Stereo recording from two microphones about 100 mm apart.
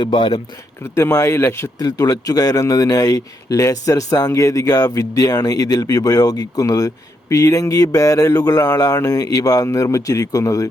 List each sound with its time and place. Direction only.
0.0 s speech: 50° left (ahead or behind)
0.9 s speech: 30° left (ahead or behind)
1.8 s a man's voice: 35° left (ahead or behind)